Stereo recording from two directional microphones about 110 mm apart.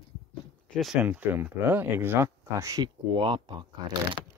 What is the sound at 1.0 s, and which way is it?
Speech, 15° right (ahead or behind).